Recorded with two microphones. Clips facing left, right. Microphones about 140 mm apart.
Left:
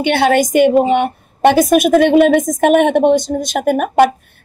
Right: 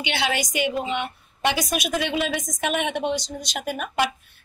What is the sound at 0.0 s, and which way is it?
A woman's voice, 50° left (ahead or behind).